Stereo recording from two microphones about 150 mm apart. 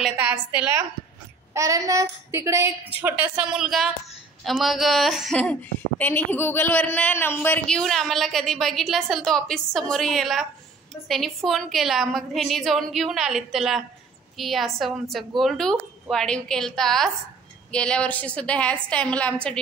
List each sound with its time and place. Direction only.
0.0 s a woman's voice: 10° right (ahead or behind); by 19.3 s 10° left (ahead or behind)